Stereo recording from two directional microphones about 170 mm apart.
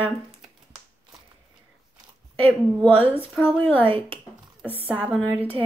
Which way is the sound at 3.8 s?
30° right (ahead or behind).